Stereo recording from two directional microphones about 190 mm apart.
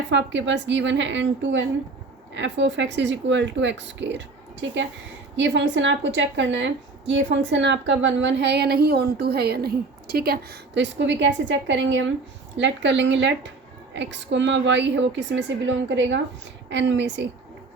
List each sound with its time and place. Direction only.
0.1 s a woman's voice: 70° right (ahead or behind)